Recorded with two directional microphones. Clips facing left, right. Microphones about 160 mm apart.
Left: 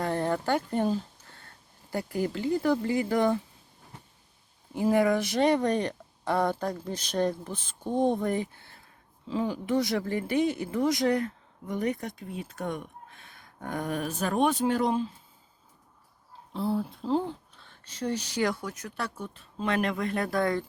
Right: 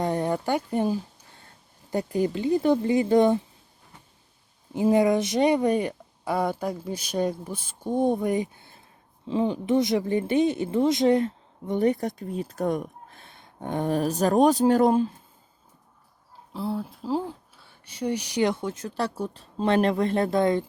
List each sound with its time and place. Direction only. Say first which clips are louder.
0.0 s a sound: right 3 dB; 15° right (ahead or behind)
1.9 s speech: right 5 dB; 20° right (ahead or behind)
4.7 s speech: right 3 dB; 20° right (ahead or behind); by 15.1 s 45° right (ahead or behind)
16.5 s speech: left 1 dB; centre (ahead or behind); by 20.7 s 20° right (ahead or behind)